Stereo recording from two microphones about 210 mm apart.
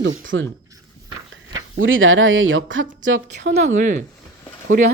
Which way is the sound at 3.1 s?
35° right (ahead or behind).